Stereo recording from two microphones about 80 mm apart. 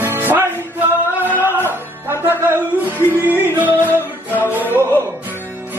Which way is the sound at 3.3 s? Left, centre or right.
Right.